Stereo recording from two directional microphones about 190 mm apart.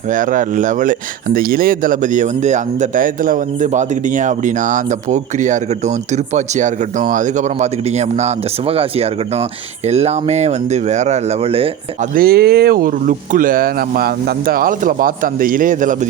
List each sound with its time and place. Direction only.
0.1 s speech: 45° right (ahead or behind)
12.1 s speech: 50° right (ahead or behind)